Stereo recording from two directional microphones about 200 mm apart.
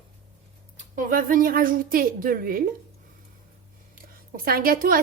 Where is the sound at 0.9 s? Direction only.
40° right (ahead or behind).